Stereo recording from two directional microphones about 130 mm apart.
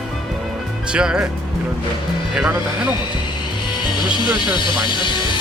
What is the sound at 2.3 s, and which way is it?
Speech, 5° right (ahead or behind).